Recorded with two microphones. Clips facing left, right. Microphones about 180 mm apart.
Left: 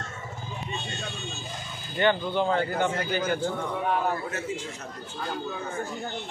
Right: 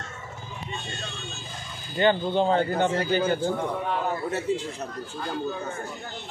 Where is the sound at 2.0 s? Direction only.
25° right (ahead or behind).